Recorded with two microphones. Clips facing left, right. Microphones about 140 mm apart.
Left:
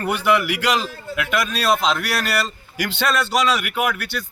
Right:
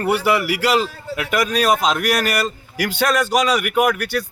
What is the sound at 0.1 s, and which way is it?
Speech, 35° right (ahead or behind).